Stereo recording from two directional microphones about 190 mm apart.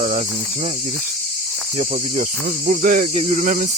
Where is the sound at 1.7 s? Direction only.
35° right (ahead or behind).